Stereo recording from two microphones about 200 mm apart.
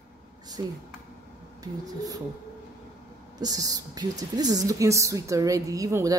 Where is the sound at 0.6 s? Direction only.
20° right (ahead or behind).